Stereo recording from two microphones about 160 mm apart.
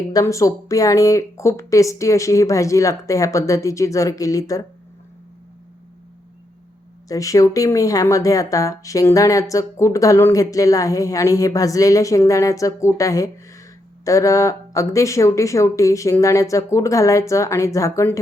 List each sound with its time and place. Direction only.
0.1 s speech: 20° left (ahead or behind)
7.1 s speech: 20° left (ahead or behind)